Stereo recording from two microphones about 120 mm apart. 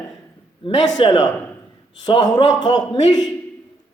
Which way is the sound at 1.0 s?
45° left (ahead or behind).